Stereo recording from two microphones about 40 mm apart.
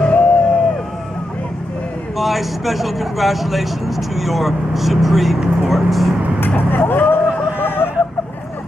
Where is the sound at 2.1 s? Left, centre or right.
Centre.